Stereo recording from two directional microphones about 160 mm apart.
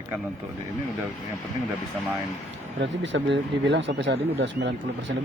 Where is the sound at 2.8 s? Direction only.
90° right.